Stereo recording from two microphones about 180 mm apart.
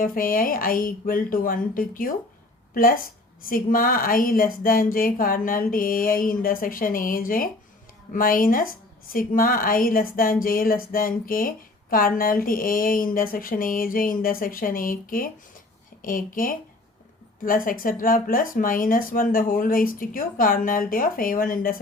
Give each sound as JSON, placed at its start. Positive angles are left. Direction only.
{"t": 0.0, "sound": "a woman's voice", "side_deg": 50}